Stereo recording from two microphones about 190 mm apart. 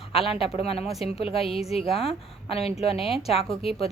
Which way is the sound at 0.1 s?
30° left (ahead or behind).